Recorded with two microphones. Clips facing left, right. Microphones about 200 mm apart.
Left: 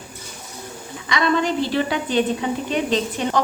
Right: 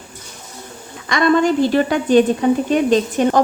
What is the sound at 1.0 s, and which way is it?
A woman's voice, 50° right (ahead or behind).